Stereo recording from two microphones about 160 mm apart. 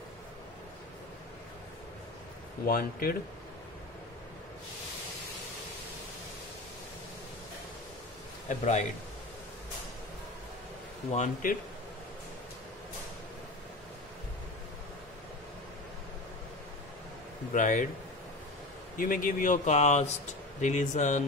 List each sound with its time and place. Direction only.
2.6 s speech: 65° left (ahead or behind)
8.5 s speech: 45° left (ahead or behind)
11.1 s speech: 50° left (ahead or behind)
17.5 s speech: 55° left (ahead or behind)
18.9 s speech: 60° left (ahead or behind)